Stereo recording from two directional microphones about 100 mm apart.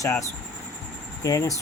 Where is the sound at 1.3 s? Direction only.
35° left (ahead or behind).